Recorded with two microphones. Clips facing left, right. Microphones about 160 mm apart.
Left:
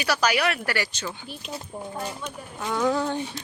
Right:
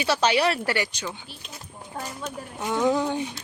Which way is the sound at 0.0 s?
25° right (ahead or behind).